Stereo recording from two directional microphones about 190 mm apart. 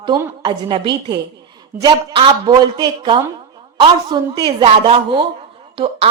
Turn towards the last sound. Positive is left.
turn(degrees=-30)  # may be behind; listen again after turning